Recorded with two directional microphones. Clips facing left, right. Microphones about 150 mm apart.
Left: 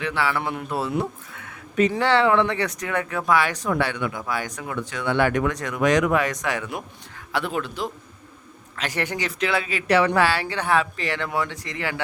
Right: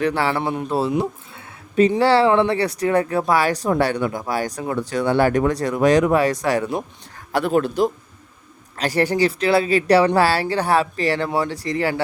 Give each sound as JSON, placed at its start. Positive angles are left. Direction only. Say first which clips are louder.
{"t": 0.0, "sound": "a man's voice", "louder": "right 5 dB", "side_deg": -40}